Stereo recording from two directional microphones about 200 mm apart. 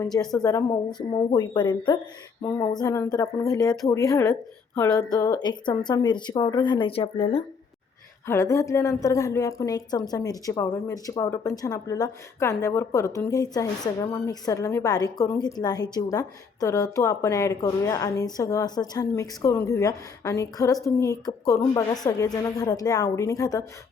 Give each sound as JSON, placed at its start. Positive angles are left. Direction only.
{"t": 0.0, "sound": "a woman's voice", "side_deg": 20}
{"t": 8.3, "sound": "a woman's voice", "side_deg": 15}